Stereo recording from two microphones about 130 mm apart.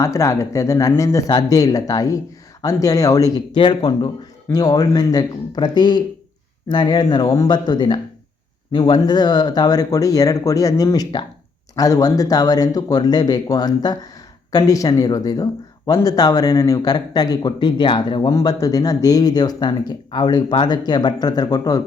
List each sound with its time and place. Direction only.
0.0 s speech: 25° left (ahead or behind)